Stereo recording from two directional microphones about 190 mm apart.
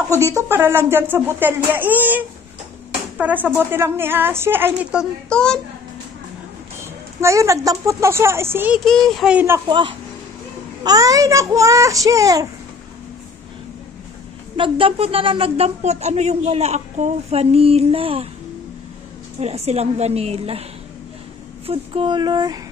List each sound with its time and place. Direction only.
0.1 s speech: 15° right (ahead or behind)
5.3 s speech: 5° left (ahead or behind)
7.2 s speech: 15° right (ahead or behind)
8.8 s speech: centre (ahead or behind)
9.7 s speech: 25° right (ahead or behind)
14.6 s speech: 30° right (ahead or behind)
19.4 s speech: 35° right (ahead or behind)
21.6 s speech: 25° right (ahead or behind)